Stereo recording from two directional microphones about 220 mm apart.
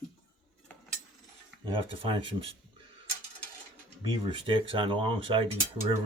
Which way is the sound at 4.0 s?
20° right (ahead or behind).